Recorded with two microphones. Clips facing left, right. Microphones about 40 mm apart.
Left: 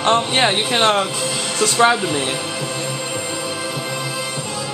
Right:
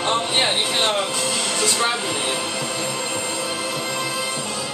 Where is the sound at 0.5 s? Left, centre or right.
Left.